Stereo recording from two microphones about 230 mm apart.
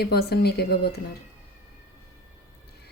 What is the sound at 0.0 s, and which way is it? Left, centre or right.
A woman's voice, left.